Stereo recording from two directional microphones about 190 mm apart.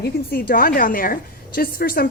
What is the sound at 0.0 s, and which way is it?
A woman's voice, 55° left (ahead or behind).